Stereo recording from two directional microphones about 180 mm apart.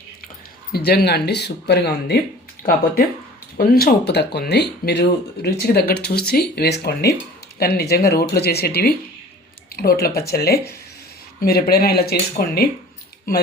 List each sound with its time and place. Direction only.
0.7 s speech: 60° left (ahead or behind)
3.6 s speech: 55° left (ahead or behind)